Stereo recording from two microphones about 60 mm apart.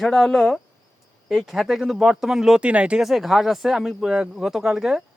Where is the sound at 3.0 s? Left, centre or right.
Centre.